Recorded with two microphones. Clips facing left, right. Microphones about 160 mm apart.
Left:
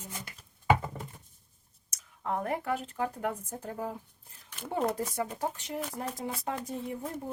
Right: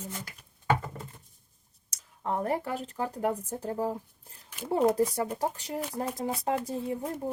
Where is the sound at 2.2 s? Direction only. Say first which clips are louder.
Right 3 dB; 35° right (ahead or behind).